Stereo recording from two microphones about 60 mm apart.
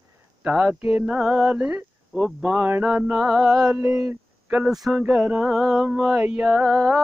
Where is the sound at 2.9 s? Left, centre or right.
Centre.